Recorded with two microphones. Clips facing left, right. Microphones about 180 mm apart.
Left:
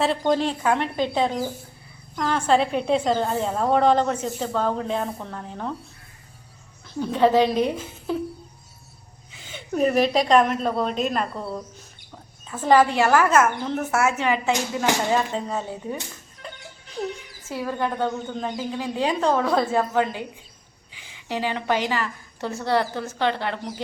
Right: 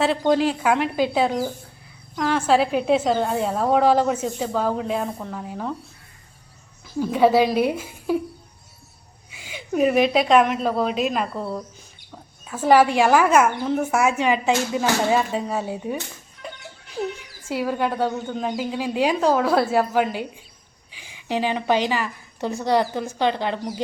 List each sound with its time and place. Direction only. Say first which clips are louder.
0.0 s a woman's voice: right 2 dB; centre (ahead or behind)
7.0 s a woman's voice: right 1 dB; 10° right (ahead or behind)
9.3 s a woman's voice: right 3 dB; 10° right (ahead or behind)
17.5 s a woman's voice: right 3 dB; 10° right (ahead or behind)